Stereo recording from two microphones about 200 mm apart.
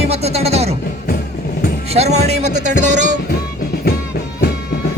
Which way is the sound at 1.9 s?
35° right (ahead or behind).